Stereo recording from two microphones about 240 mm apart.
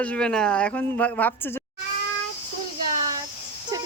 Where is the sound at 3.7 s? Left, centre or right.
Centre.